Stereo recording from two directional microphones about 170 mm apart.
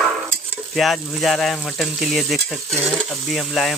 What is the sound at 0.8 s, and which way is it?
Speech, centre (ahead or behind).